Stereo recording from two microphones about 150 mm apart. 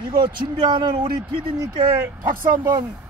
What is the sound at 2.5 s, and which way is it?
Speech, 25° right (ahead or behind).